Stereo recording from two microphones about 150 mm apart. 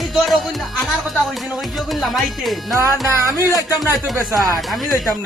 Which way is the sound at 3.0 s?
20° right (ahead or behind).